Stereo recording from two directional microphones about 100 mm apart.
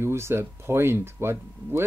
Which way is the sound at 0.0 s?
25° right (ahead or behind).